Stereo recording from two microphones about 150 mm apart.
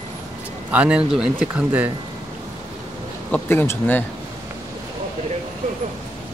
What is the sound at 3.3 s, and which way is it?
Speech, 15° left (ahead or behind).